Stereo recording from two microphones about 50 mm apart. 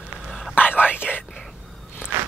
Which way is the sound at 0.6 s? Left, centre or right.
Left.